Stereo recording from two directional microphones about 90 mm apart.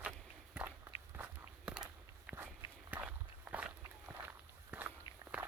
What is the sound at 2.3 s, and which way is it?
Walk, 15° right (ahead or behind).